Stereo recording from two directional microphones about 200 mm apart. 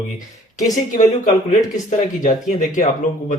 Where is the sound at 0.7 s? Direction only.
40° left (ahead or behind).